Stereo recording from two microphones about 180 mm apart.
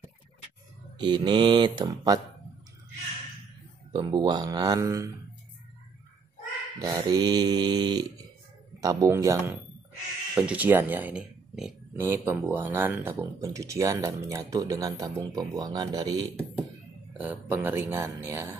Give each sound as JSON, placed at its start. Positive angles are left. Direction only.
{"t": 0.9, "sound": "speech", "side_deg": -25}
{"t": 3.9, "sound": "speech", "side_deg": -25}
{"t": 6.8, "sound": "speech", "side_deg": -20}
{"t": 17.2, "sound": "speech", "side_deg": -10}